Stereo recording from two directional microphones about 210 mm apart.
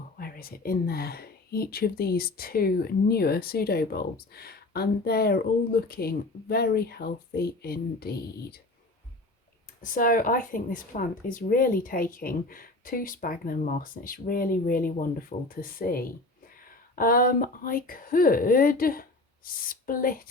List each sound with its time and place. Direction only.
0.2 s speech: 45° left (ahead or behind)
9.8 s speech: 40° left (ahead or behind)